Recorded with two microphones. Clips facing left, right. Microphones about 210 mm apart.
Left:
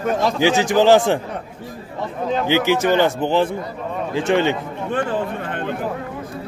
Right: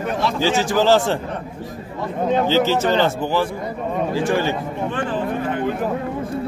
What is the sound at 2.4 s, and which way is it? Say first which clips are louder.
A man's voice: left 4 dB; 15° left (ahead or behind).